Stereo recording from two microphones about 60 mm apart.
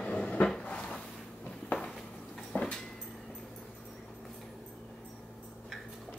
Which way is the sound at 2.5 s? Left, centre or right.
Centre.